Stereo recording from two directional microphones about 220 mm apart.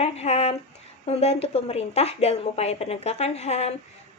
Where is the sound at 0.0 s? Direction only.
30° left (ahead or behind).